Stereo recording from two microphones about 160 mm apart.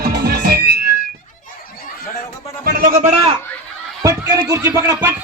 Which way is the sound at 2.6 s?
65° right (ahead or behind).